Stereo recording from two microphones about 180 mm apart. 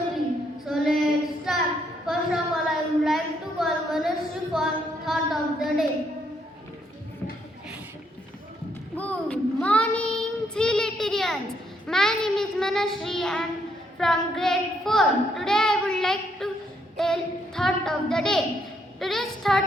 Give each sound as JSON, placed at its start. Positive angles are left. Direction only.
{"t": 0.6, "sound": "child singing", "side_deg": 0}
{"t": 2.0, "sound": "a sound", "side_deg": 0}
{"t": 9.0, "sound": "child singing", "side_deg": 5}
{"t": 14.0, "sound": "a woman's voice", "side_deg": 5}
{"t": 17.0, "sound": "a sound", "side_deg": 0}
{"t": 18.9, "sound": "a woman's voice", "side_deg": 0}